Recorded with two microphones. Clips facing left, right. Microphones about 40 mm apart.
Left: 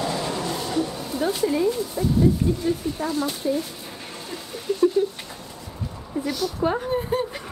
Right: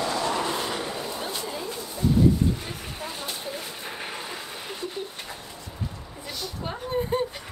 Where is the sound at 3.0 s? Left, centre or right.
Right.